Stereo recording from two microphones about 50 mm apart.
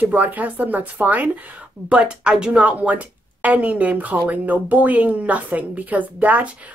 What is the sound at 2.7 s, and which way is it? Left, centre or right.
Speech, right.